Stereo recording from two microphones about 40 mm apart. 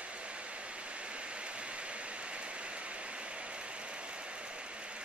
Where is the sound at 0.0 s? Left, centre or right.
Right.